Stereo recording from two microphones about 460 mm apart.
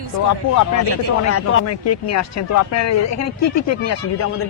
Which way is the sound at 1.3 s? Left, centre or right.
Left.